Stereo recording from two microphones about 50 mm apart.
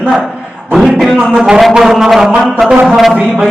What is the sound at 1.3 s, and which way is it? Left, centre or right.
Speech, centre.